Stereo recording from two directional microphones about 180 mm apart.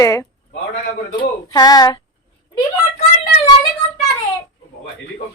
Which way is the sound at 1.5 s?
20° left (ahead or behind).